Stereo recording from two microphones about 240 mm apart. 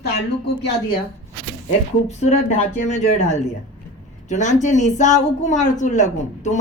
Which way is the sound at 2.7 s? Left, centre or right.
Left.